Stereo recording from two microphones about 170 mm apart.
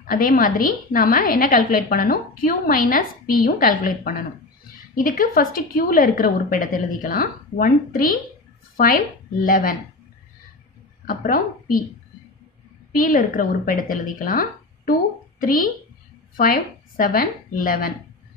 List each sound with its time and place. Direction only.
0.0 s a woman's voice: 55° left (ahead or behind)
11.1 s a woman's voice: 55° left (ahead or behind)
12.9 s a woman's voice: 55° left (ahead or behind)